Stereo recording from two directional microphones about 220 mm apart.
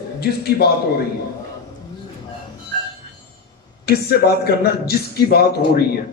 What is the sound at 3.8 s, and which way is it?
A man's voice, 45° left (ahead or behind).